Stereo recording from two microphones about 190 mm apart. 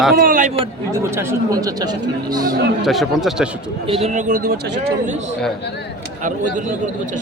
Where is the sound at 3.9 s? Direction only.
30° right (ahead or behind).